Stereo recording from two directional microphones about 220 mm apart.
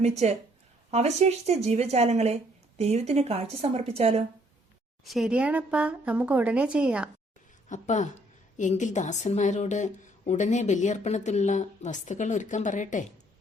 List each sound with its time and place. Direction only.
0.0 s speech: 30° right (ahead or behind)
5.0 s speech: centre (ahead or behind)
7.7 s speech: 30° left (ahead or behind)